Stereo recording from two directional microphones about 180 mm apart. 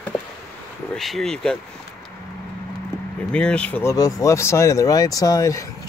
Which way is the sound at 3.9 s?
20° left (ahead or behind).